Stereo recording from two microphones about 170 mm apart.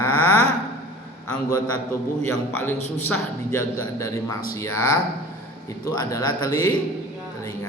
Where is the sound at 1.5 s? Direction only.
20° left (ahead or behind).